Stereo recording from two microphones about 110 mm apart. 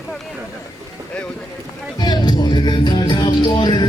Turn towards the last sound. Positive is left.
turn(degrees=45)  # may be behind; listen again after turning